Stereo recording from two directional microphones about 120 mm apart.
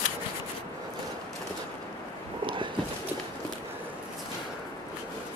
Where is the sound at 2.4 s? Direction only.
45° right (ahead or behind).